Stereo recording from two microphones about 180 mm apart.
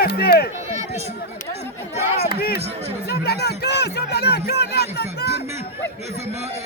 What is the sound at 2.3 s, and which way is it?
Speech, 60° left (ahead or behind).